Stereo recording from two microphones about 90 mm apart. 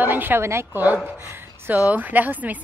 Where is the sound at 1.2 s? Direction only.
25° right (ahead or behind).